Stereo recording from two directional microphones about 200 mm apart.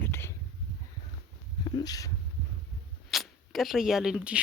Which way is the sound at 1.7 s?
20° left (ahead or behind).